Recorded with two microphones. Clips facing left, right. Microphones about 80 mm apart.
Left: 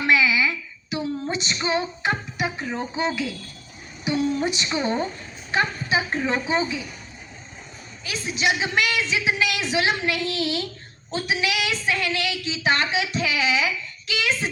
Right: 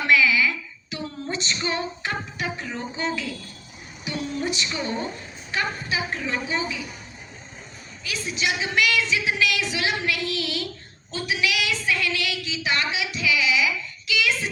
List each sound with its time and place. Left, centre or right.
0.1 s female singing: left
4.1 s a woman's voice: left
8.0 s a woman's voice: left
14.1 s a sound: left